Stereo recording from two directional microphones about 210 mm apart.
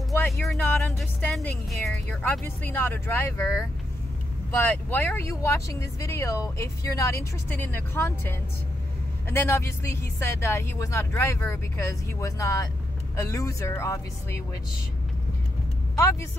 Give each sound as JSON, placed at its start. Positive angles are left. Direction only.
{"t": 0.4, "sound": "speech", "side_deg": 0}